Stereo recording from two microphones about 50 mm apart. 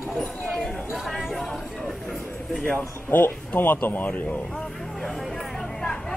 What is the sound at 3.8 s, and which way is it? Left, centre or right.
Speech, left.